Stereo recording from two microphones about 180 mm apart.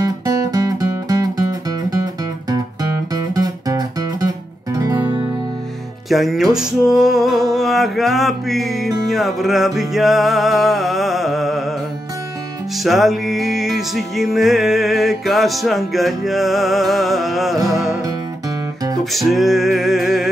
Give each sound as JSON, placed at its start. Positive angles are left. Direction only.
{"t": 0.0, "sound": "music", "side_deg": -20}
{"t": 3.3, "sound": "music", "side_deg": -20}
{"t": 6.0, "sound": "music", "side_deg": 0}
{"t": 12.8, "sound": "music", "side_deg": 0}
{"t": 19.1, "sound": "music", "side_deg": 0}